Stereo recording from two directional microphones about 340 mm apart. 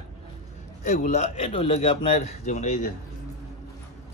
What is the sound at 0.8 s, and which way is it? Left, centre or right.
Speech, left.